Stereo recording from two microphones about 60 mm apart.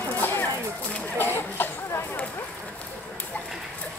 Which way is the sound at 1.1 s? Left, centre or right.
Left.